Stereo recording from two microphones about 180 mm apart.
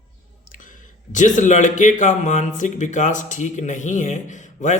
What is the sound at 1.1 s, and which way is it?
Speech, 45° left (ahead or behind).